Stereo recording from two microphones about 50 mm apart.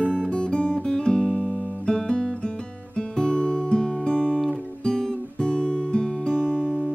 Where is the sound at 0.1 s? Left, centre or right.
Centre.